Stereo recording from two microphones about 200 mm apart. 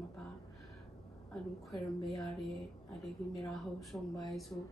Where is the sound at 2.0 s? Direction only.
Centre (ahead or behind).